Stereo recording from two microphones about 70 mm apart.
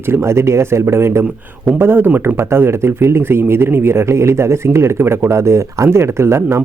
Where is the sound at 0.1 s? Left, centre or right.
Right.